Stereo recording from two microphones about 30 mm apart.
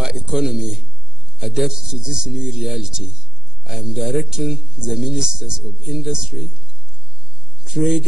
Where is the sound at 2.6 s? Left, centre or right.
Centre.